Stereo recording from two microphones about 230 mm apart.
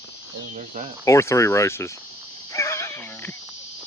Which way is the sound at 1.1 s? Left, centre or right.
Centre.